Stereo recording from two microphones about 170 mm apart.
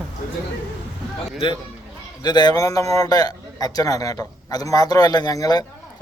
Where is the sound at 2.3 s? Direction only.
25° left (ahead or behind).